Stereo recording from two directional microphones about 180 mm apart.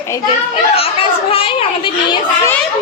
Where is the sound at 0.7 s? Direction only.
30° left (ahead or behind).